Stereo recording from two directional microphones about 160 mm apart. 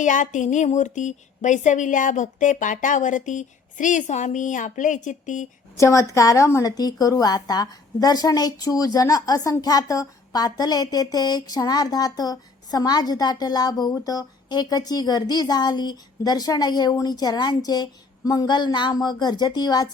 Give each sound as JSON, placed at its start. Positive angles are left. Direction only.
{"t": 0.0, "sound": "speech", "side_deg": 50}
{"t": 5.7, "sound": "a woman's voice", "side_deg": 20}